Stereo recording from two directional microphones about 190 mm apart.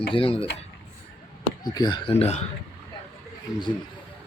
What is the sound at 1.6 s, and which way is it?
Speech, 20° left (ahead or behind).